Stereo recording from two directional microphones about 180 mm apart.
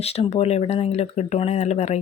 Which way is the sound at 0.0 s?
35° left (ahead or behind).